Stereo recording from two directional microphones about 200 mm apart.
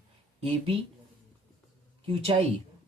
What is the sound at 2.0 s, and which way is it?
Speech, 25° right (ahead or behind).